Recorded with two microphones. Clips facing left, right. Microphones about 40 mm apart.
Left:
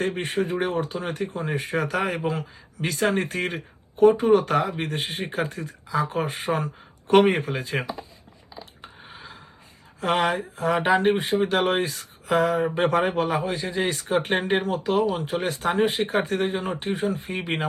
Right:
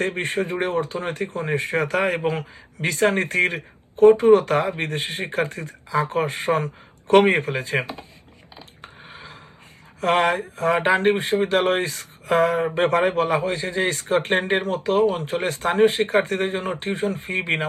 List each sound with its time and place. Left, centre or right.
0.0 s speech: right
8.5 s a sound: right
10.0 s speech: right